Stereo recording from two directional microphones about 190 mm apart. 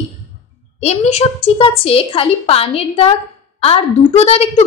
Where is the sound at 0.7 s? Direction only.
35° left (ahead or behind).